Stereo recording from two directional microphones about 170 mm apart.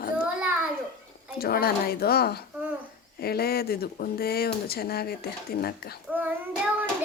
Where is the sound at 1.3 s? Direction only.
65° left (ahead or behind).